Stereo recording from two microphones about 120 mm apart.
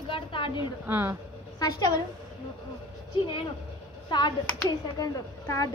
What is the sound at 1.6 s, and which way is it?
Speech, 35° left (ahead or behind).